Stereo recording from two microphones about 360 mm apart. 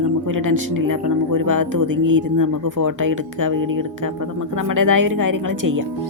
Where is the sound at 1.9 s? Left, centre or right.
Right.